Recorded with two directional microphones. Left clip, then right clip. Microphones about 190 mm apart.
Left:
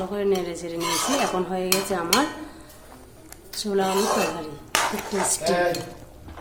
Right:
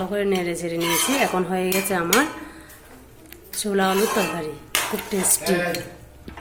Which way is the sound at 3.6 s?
15° right (ahead or behind).